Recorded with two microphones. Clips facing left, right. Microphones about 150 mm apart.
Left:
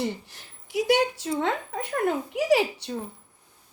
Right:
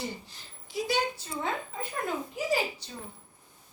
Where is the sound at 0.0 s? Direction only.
70° left (ahead or behind).